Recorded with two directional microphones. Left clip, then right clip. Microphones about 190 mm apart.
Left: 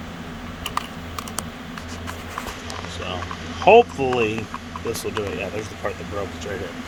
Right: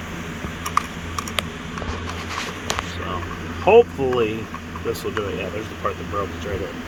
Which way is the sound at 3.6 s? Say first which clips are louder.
Left 1 dB; 15° left (ahead or behind).